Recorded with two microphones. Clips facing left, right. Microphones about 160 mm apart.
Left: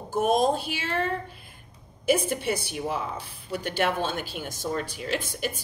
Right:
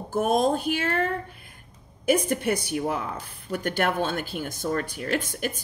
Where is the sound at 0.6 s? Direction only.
50° right (ahead or behind).